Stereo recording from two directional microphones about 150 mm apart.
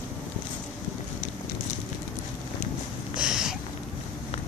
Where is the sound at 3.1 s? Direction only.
5° right (ahead or behind).